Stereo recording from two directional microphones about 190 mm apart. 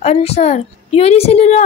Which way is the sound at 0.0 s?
35° left (ahead or behind).